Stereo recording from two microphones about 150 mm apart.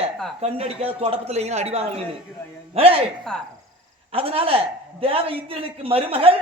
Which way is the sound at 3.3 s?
5° left (ahead or behind).